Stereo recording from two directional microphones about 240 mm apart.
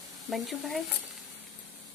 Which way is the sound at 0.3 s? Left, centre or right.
Centre.